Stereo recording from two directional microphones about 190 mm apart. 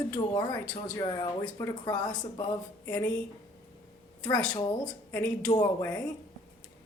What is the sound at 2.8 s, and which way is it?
Speech, 10° left (ahead or behind).